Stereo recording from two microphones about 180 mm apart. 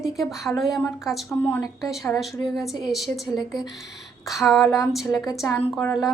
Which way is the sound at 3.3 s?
25° left (ahead or behind).